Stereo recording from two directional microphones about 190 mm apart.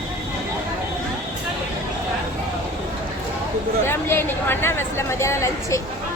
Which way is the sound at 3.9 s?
10° left (ahead or behind).